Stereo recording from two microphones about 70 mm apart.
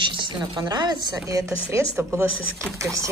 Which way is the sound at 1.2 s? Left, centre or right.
Right.